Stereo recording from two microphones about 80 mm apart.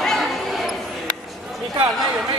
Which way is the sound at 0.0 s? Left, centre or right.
Centre.